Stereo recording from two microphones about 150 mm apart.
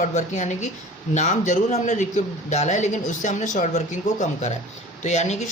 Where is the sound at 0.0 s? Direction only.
55° left (ahead or behind).